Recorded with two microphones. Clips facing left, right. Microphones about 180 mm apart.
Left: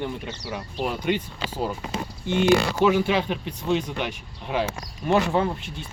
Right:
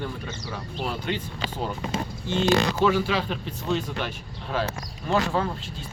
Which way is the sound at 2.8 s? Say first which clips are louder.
Left 2 dB; 15° left (ahead or behind).